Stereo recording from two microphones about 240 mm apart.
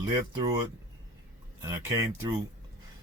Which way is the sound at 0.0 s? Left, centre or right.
Centre.